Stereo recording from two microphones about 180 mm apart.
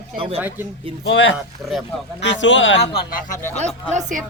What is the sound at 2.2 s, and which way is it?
Speech, 90° left.